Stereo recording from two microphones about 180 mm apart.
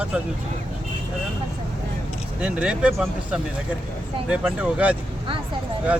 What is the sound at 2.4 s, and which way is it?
Speech, 5° right (ahead or behind).